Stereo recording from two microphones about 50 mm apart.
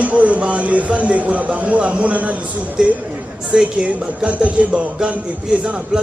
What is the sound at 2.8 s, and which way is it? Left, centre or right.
Speech, centre.